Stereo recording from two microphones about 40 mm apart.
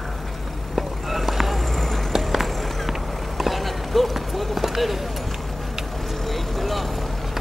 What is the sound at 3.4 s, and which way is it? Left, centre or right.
Run, centre.